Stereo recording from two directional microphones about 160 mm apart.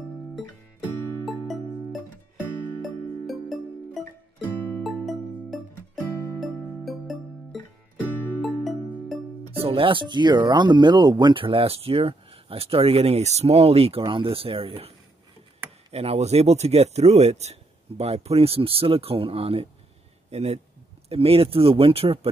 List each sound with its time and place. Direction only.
1.2 s music: centre (ahead or behind)
9.6 s speech: 35° right (ahead or behind)
15.9 s a man's voice: 40° right (ahead or behind)